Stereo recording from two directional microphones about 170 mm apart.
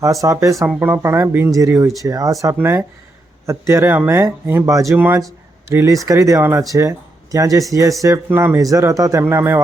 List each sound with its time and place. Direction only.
0.0 s speech: 20° right (ahead or behind)